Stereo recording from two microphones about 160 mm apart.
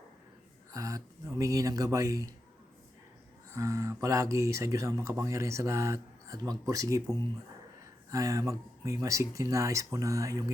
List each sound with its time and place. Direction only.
0.7 s speech: 20° right (ahead or behind)
3.5 s speech: 20° right (ahead or behind)